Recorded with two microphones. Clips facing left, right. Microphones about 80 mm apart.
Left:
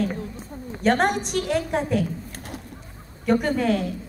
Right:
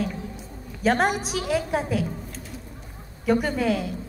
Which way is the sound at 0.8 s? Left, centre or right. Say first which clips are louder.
Left 1 dB; centre.